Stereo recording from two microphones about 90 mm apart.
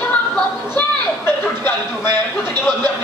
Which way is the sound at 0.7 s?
25° left (ahead or behind).